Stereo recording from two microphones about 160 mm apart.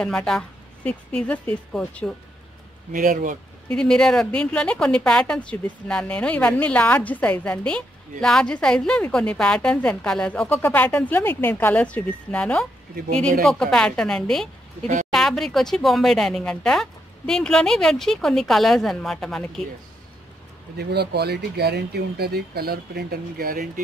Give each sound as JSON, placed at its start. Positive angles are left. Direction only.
{"t": 0.0, "sound": "speech", "side_deg": 5}
{"t": 2.9, "sound": "speech", "side_deg": -60}
{"t": 3.6, "sound": "a woman's voice", "side_deg": 5}
{"t": 20.7, "sound": "speech", "side_deg": -90}